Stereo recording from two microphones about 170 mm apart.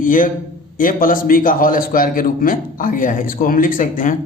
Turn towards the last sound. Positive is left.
turn(degrees=50)  # may be behind; listen again after turning